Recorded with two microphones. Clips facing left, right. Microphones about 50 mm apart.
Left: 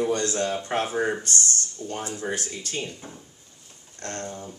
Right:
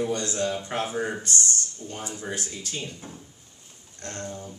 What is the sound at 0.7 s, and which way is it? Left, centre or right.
Speech, left.